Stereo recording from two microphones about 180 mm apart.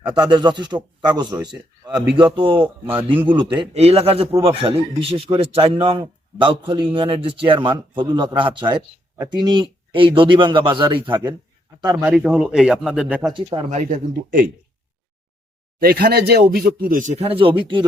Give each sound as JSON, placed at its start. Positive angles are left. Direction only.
{"t": 0.1, "sound": "a man's voice", "side_deg": -25}
{"t": 12.1, "sound": "speech", "side_deg": -5}
{"t": 13.3, "sound": "a man's voice", "side_deg": -25}
{"t": 13.7, "sound": "speech", "side_deg": -45}
{"t": 15.8, "sound": "speech", "side_deg": -55}
{"t": 17.0, "sound": "a man's voice", "side_deg": -40}